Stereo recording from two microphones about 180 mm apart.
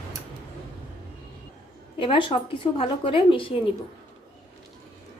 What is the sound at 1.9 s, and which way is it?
A woman's voice, 30° left (ahead or behind).